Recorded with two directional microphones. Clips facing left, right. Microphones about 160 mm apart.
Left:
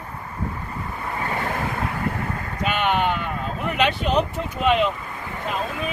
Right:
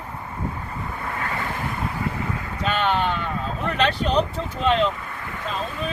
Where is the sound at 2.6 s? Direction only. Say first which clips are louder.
Left 1 dB; 10° left (ahead or behind).